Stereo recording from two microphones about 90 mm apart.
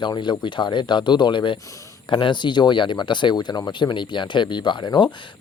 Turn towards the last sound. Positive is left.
turn(degrees=60)  # may be behind; listen again after turning